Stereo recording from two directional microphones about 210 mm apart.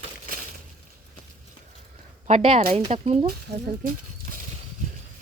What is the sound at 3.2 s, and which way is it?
Speech, 45° right (ahead or behind).